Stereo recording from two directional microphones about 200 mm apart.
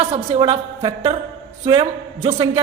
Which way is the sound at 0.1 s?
25° right (ahead or behind).